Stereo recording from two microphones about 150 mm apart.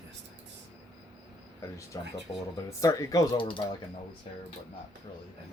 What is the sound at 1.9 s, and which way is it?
Speech, 20° left (ahead or behind).